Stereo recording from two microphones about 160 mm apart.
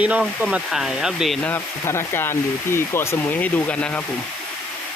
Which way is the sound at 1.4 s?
15° left (ahead or behind).